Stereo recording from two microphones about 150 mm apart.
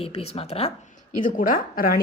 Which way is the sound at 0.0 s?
45° left (ahead or behind).